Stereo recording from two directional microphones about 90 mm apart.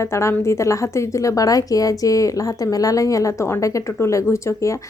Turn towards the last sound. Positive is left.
turn(degrees=35)  # may be behind; listen again after turning